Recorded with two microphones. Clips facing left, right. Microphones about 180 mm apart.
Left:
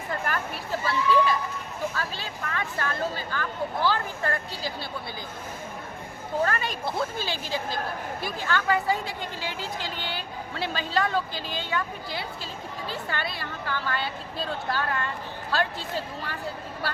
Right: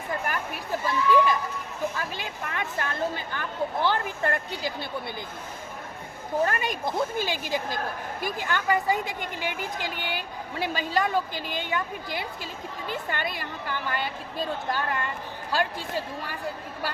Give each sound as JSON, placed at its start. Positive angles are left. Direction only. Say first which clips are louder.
{"t": 0.3, "sound": "speech", "louder": "even", "side_deg": -15}
{"t": 6.4, "sound": "a woman's voice", "louder": "right 1 dB", "side_deg": -15}